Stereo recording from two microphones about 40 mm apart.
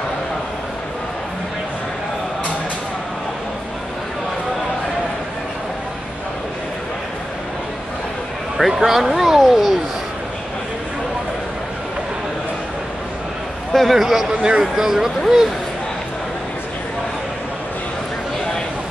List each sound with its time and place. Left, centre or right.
8.5 s speech: centre
13.7 s a man's voice: centre
14.4 s speech: right
14.8 s speech: centre